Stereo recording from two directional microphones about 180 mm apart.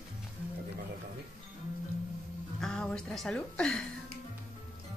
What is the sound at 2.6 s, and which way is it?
A woman's voice, 5° left (ahead or behind).